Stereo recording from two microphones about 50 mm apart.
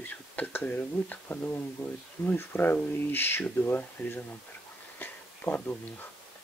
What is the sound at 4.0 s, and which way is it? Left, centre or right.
Speech, left.